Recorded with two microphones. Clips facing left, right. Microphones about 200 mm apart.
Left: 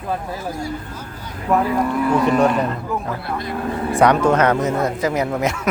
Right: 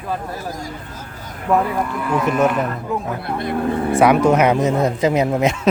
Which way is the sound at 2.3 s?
5° right (ahead or behind).